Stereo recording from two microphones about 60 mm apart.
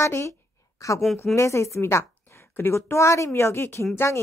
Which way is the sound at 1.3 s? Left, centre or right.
Left.